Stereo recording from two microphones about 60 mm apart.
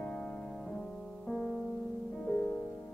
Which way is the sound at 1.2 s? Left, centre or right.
Centre.